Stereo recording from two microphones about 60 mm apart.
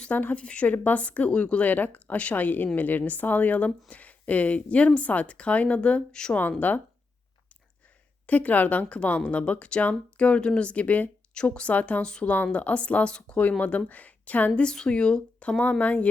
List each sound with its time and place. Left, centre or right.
0.0 s a woman's voice: left
6.6 s a woman's voice: left
8.3 s a woman's voice: left
14.6 s speech: centre